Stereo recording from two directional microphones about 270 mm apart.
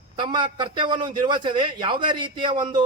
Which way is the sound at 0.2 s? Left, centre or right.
Centre.